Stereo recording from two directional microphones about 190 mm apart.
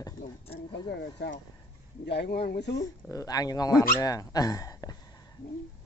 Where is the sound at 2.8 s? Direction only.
15° left (ahead or behind).